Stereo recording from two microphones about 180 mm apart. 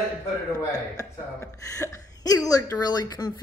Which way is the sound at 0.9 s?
15° left (ahead or behind).